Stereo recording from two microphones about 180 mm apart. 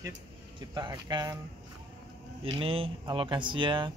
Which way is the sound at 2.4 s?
30° right (ahead or behind).